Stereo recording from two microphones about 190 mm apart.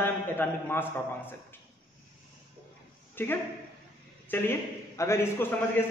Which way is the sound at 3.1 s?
10° left (ahead or behind).